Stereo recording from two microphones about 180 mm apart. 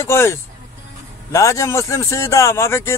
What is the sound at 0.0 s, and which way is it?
Speech, 15° left (ahead or behind).